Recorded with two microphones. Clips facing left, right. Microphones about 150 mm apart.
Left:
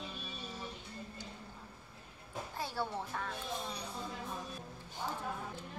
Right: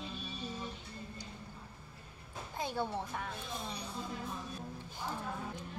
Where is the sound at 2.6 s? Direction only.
15° right (ahead or behind).